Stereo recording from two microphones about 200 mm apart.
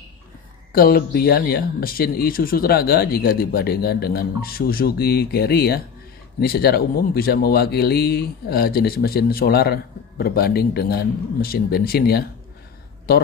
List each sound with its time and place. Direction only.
0.7 s speech: 50° left (ahead or behind)